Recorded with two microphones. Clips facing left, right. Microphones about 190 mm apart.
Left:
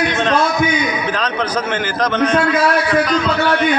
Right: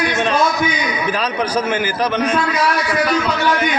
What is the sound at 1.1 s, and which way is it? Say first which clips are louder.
A man's voice: even; 10° right (ahead or behind).